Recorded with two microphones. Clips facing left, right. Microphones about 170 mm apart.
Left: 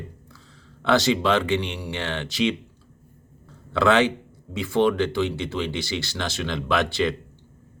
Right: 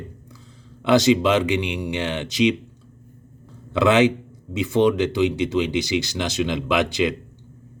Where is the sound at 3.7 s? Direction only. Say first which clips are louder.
Right 3 dB; 20° right (ahead or behind).